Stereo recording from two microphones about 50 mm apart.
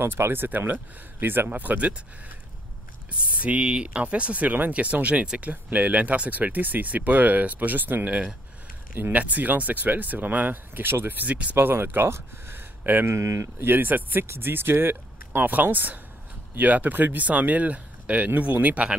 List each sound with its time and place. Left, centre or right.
0.0 s speech: right
1.5 s speech: right
3.1 s speech: right
11.5 s speech: right
13.0 s speech: right
13.6 s speech: right
14.2 s speech: right